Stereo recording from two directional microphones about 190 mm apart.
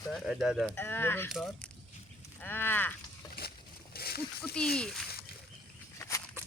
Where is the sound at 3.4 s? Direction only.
50° left (ahead or behind).